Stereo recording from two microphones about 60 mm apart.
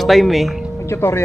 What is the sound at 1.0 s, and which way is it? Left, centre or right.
Speech, left.